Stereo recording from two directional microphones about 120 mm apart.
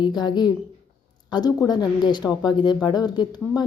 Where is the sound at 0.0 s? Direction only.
40° left (ahead or behind).